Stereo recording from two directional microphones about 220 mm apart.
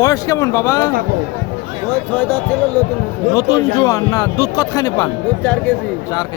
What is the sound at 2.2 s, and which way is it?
Speech, 5° left (ahead or behind).